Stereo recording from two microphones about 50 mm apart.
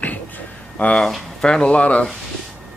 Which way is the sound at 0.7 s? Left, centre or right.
Left.